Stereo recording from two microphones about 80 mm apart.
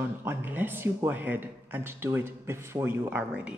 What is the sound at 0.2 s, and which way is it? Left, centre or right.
Speech, right.